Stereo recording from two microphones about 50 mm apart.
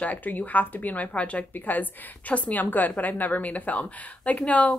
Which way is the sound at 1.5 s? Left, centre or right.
Left.